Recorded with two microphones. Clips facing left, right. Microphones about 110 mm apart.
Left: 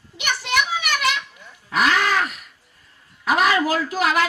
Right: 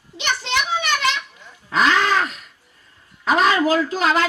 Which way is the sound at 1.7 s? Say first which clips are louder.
Right 2 dB; 25° right (ahead or behind).